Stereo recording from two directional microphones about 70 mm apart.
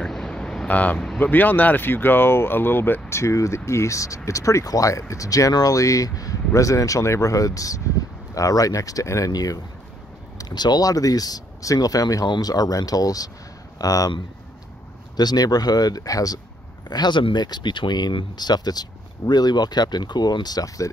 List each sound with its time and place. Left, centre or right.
0.0 s a sound: centre
0.7 s speech: left
0.9 s speech: centre
1.2 s speech: left
9.3 s speech: left
10.3 s speech: left
15.1 s speech: left
16.9 s speech: left